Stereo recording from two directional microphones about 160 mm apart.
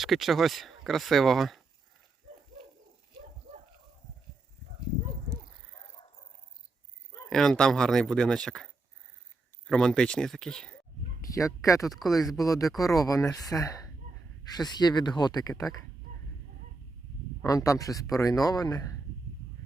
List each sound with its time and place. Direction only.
0.0 s speech: centre (ahead or behind)
7.3 s speech: 5° left (ahead or behind)
11.3 s speech: 20° left (ahead or behind)
11.9 s speech: centre (ahead or behind)
12.4 s speech: 20° left (ahead or behind)
17.4 s speech: 20° left (ahead or behind)